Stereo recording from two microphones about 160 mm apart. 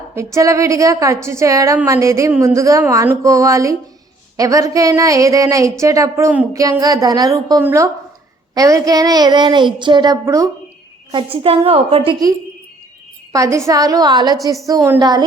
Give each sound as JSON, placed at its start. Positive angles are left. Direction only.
{"t": 0.2, "sound": "speech", "side_deg": -20}
{"t": 11.1, "sound": "a woman's voice", "side_deg": -35}
{"t": 13.3, "sound": "speech", "side_deg": -20}